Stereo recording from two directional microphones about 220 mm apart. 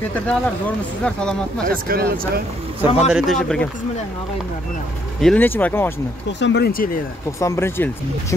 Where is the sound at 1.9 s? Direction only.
45° right (ahead or behind).